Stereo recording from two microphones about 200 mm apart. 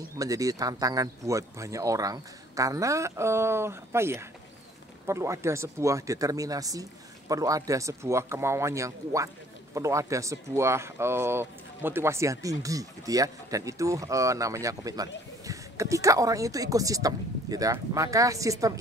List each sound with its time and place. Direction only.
0.2 s speech: 15° right (ahead or behind)